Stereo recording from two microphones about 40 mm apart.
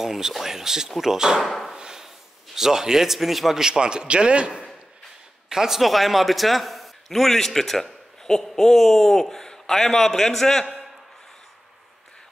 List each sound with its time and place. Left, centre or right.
0.0 s speech: centre
1.8 s a sound: centre
2.5 s speech: centre
3.6 s a man's voice: centre
5.5 s a man's voice: centre
5.8 s a man's voice: centre